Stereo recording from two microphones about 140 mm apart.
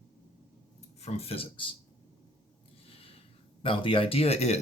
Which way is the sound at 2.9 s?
45° left (ahead or behind).